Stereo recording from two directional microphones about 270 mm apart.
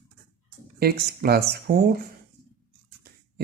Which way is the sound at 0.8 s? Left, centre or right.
Right.